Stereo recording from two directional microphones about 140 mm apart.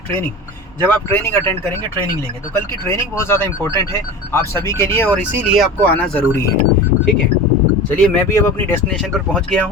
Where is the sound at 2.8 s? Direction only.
20° left (ahead or behind).